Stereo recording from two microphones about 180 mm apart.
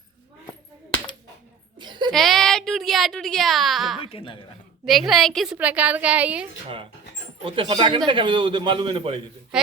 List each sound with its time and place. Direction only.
1.8 s a sound: 25° right (ahead or behind)
2.1 s speech: centre (ahead or behind)
4.1 s speech: 30° left (ahead or behind)
4.9 s a woman's voice: centre (ahead or behind)
7.4 s a man's voice: 30° right (ahead or behind)